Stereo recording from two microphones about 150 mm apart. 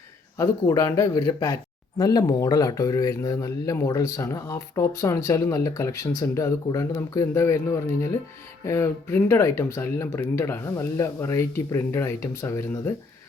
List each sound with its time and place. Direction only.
0.3 s speech: 20° left (ahead or behind)